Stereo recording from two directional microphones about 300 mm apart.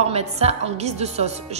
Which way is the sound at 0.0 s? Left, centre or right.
Right.